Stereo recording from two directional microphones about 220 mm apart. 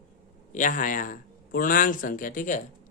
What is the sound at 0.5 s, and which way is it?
A man's voice, 35° left (ahead or behind).